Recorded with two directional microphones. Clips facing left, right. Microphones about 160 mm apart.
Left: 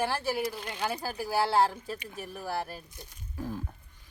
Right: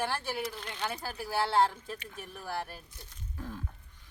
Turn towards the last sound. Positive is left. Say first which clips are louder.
# left 5 dB
turn(degrees=10)  # may be behind; listen again after turning